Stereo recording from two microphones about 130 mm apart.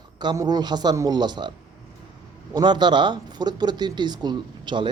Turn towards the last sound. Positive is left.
turn(degrees=-35)  # may be behind; listen again after turning